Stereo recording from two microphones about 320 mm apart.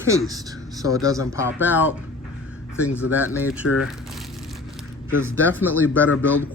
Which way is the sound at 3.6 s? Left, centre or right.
Left.